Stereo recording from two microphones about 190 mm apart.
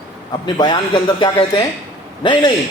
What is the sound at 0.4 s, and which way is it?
A man's voice, 25° left (ahead or behind).